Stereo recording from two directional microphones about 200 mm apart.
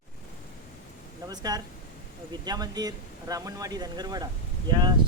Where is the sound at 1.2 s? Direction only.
20° right (ahead or behind).